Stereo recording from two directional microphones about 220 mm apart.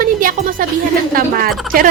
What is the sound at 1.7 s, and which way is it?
Speech, 40° right (ahead or behind).